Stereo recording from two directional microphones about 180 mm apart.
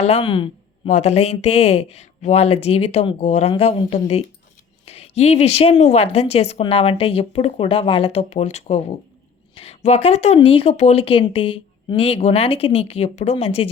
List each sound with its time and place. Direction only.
0.0 s speech: 35° left (ahead or behind)
0.9 s speech: 40° left (ahead or behind)